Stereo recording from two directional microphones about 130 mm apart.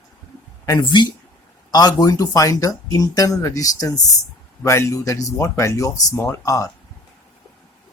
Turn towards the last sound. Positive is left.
turn(degrees=25)  # may be behind; listen again after turning